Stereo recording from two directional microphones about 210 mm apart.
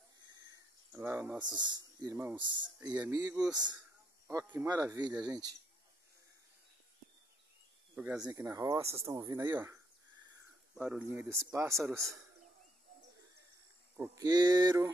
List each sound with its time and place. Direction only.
0.5 s a sound: 10° right (ahead or behind)
1.4 s speech: 20° right (ahead or behind)
7.9 s speech: 5° right (ahead or behind)
13.9 s speech: 15° right (ahead or behind)